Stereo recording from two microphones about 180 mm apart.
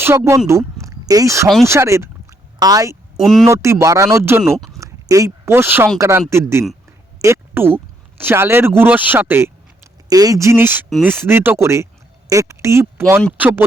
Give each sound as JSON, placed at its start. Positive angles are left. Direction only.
{"t": 0.0, "sound": "speech", "side_deg": -15}
{"t": 3.2, "sound": "speech", "side_deg": 0}
{"t": 3.4, "sound": "speech", "side_deg": -15}